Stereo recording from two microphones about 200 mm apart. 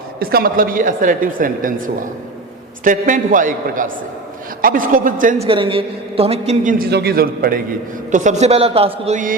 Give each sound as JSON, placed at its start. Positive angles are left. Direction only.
{"t": 0.2, "sound": "a woman's voice", "side_deg": -50}
{"t": 5.5, "sound": "a woman's voice", "side_deg": -25}
{"t": 6.7, "sound": "a man's voice", "side_deg": -50}